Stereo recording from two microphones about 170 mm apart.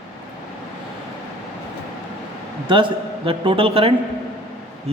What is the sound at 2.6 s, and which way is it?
A man's voice, 30° right (ahead or behind).